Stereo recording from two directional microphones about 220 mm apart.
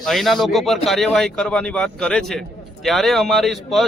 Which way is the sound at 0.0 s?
Centre (ahead or behind).